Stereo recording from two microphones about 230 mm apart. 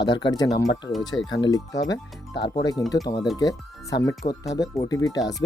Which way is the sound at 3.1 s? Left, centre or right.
Left.